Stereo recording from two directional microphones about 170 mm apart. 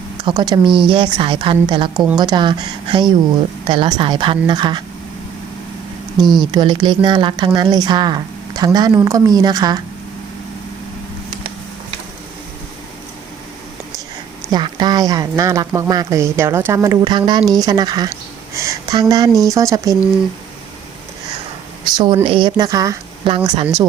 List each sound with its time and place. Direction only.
0.3 s a woman's voice: 25° right (ahead or behind)
6.2 s speech: centre (ahead or behind)
6.5 s speech: 25° right (ahead or behind)
14.5 s speech: 25° right (ahead or behind)
21.8 s speech: 25° right (ahead or behind)